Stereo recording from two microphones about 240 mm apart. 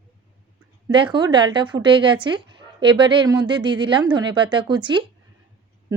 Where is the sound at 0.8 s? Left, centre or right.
Centre.